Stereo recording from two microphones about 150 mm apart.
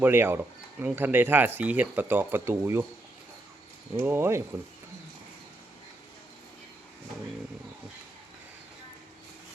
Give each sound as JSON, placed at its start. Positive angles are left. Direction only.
{"t": 0.0, "sound": "speech", "side_deg": -15}
{"t": 3.9, "sound": "speech", "side_deg": -15}